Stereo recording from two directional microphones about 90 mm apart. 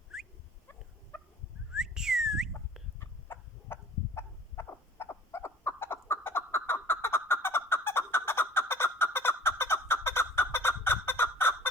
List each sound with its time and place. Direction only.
0.1 s dog: 5° right (ahead or behind)
1.1 s dog: 20° left (ahead or behind)
1.7 s whistling: 5° right (ahead or behind)
3.0 s fowl: 25° left (ahead or behind)